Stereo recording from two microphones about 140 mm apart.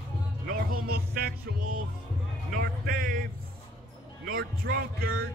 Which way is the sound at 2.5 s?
90° right.